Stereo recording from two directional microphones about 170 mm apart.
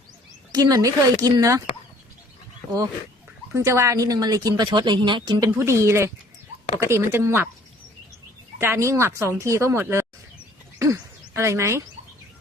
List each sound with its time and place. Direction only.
0.5 s speech: 20° right (ahead or behind)
3.5 s speech: 15° right (ahead or behind)
8.5 s speech: 15° right (ahead or behind)
10.8 s a sound: 20° right (ahead or behind)